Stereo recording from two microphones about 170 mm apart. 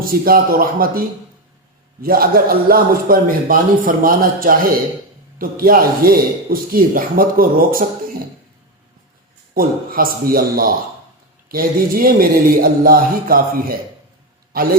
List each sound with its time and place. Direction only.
0.0 s a man's voice: 60° right (ahead or behind)
9.6 s a man's voice: 55° right (ahead or behind)